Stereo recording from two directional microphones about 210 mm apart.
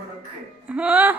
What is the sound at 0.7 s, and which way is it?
Speech, 5° right (ahead or behind).